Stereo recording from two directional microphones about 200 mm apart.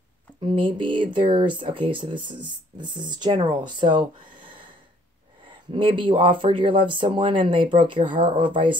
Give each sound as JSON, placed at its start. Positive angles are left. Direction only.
{"t": 0.4, "sound": "speech", "side_deg": -25}